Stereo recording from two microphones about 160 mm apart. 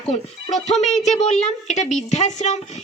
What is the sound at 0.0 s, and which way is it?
Speech, centre (ahead or behind).